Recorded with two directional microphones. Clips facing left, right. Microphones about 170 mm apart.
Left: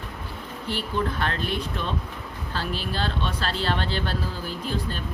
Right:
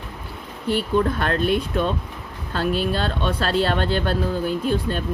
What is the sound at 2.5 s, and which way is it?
Speech, 55° right (ahead or behind).